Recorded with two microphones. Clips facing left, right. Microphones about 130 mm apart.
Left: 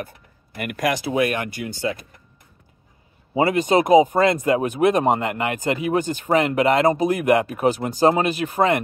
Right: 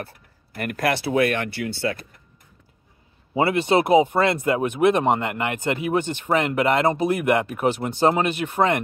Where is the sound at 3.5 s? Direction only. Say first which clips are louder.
Left 3 dB; 40° left (ahead or behind).